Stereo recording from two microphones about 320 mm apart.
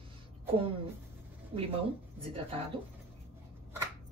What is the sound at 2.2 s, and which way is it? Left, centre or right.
Speech, centre.